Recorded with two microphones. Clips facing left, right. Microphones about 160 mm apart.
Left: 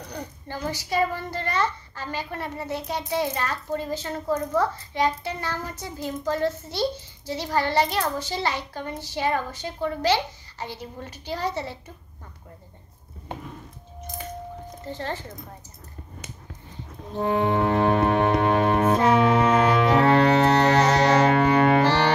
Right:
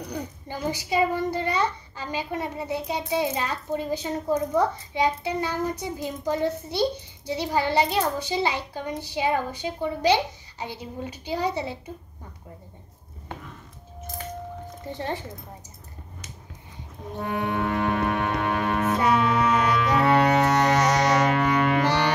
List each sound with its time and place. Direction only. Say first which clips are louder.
0.1 s a child's voice: left 2 dB; 15° right (ahead or behind)
14.9 s a child's voice: right 1 dB; 15° right (ahead or behind)
17.2 s music: left 5 dB; 25° left (ahead or behind)